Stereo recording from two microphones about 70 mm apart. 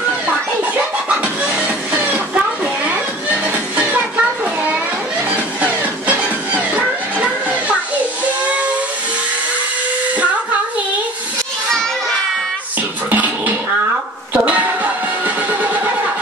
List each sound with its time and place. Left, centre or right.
0.7 s music: centre
3.7 s a sound: centre
5.3 s music: right
7.2 s children playing: centre
13.1 s music: right